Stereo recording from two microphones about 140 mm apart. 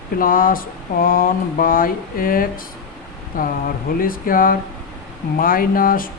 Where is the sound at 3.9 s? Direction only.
90° left.